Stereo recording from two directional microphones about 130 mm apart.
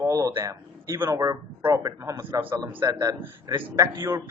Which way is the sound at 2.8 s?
25° right (ahead or behind).